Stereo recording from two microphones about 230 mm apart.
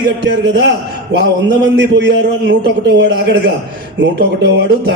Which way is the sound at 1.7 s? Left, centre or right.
Right.